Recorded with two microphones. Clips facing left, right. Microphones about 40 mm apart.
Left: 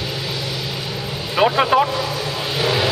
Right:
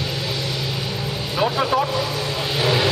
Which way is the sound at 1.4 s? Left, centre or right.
Left.